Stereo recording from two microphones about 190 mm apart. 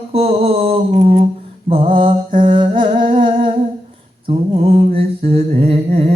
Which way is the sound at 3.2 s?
25° right (ahead or behind).